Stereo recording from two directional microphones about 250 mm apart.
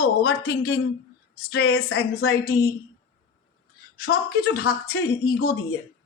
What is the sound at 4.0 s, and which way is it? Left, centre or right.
Speech, left.